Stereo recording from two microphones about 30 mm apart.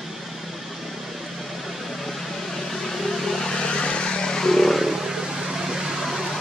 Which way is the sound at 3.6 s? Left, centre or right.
Left.